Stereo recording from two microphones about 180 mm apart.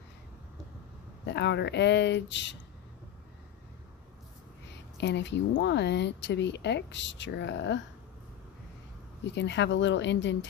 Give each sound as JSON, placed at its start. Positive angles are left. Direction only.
{"t": 1.3, "sound": "speech", "side_deg": 70}
{"t": 4.9, "sound": "speech", "side_deg": 75}
{"t": 9.2, "sound": "speech", "side_deg": 80}